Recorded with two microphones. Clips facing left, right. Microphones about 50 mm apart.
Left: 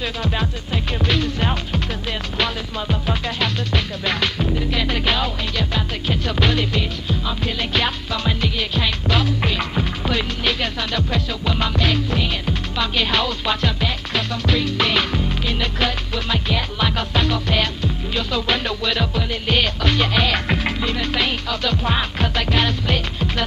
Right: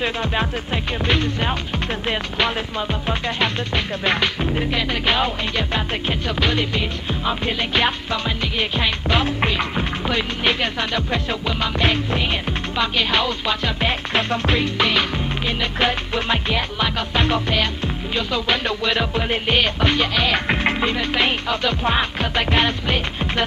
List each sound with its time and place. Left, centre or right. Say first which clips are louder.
0.0 s music: right 2 dB; right
4.6 s music: right 1 dB; centre
6.2 s music: left 2 dB; centre
7.1 s music: right 2 dB; right
11.4 s music: left 1 dB; centre
11.8 s music: right 1 dB; right
13.7 s music: right 3 dB; right
14.8 s music: even; centre
15.4 s music: right 4 dB; centre
20.5 s music: right 2 dB; right